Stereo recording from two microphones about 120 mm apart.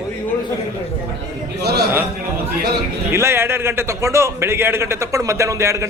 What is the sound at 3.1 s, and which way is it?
A man's voice, 20° right (ahead or behind).